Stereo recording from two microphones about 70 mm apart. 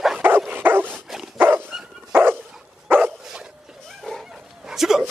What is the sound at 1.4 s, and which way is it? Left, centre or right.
Dog, right.